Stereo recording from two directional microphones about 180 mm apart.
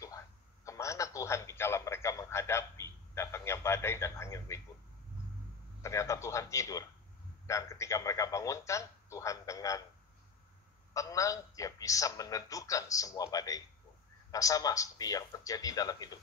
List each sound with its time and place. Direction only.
0.7 s radio: 15° left (ahead or behind)
5.8 s speech: 15° left (ahead or behind)
10.9 s a man's voice: 20° left (ahead or behind)